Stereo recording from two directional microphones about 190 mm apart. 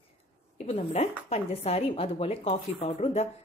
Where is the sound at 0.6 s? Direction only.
35° left (ahead or behind).